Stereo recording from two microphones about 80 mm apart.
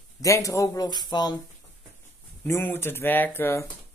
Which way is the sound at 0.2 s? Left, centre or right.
Left.